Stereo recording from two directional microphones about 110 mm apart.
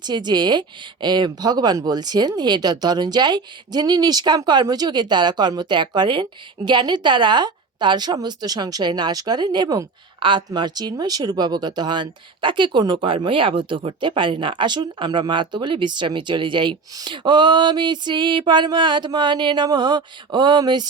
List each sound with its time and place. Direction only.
0.0 s speech: 40° right (ahead or behind)